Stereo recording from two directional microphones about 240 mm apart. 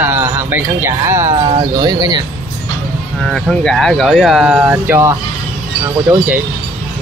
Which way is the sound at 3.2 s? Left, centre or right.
Centre.